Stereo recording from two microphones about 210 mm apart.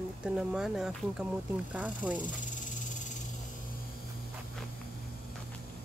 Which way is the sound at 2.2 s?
35° left (ahead or behind).